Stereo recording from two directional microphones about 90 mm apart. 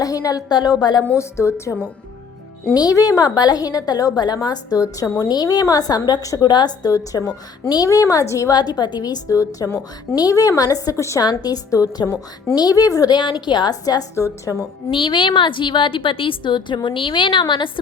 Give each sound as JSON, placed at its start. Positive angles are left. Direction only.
{"t": 0.0, "sound": "a woman's voice", "side_deg": 40}
{"t": 1.1, "sound": "a woman's voice", "side_deg": 30}
{"t": 2.7, "sound": "a woman's voice", "side_deg": 45}
{"t": 8.5, "sound": "a woman's voice", "side_deg": 50}
{"t": 9.6, "sound": "a woman's voice", "side_deg": 25}
{"t": 10.2, "sound": "a woman's voice", "side_deg": 40}
{"t": 14.8, "sound": "a woman's voice", "side_deg": 70}